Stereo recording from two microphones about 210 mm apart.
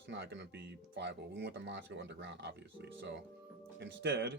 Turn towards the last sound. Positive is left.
turn(degrees=-55)  # may be behind; listen again after turning